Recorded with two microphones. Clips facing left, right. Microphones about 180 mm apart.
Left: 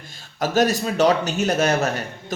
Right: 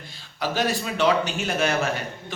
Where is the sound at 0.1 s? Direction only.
45° left (ahead or behind).